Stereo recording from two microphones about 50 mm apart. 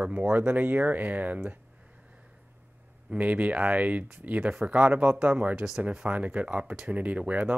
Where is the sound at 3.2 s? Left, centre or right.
Right.